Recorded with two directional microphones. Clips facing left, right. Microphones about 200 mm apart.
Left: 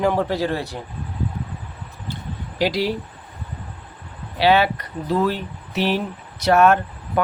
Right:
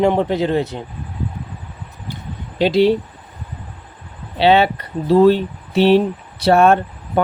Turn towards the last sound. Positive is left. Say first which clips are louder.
# right 3 dB
turn(degrees=-30)  # may be behind; listen again after turning